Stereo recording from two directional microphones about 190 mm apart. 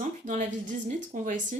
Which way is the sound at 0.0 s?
35° right (ahead or behind).